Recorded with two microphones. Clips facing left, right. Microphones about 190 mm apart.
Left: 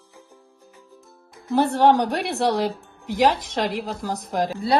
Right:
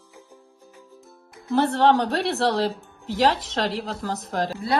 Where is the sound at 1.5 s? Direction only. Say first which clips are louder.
Left 1 dB; 15° left (ahead or behind).